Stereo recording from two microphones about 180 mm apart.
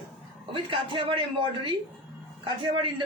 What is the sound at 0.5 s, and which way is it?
A man's voice, 30° right (ahead or behind).